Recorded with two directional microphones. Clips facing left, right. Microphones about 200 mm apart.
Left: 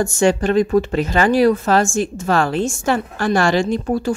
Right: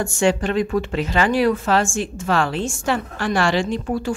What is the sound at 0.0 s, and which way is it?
Speech, 40° left (ahead or behind).